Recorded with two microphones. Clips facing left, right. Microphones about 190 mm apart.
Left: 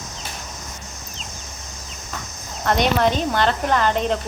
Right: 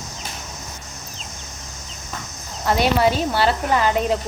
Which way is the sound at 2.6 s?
5° right (ahead or behind).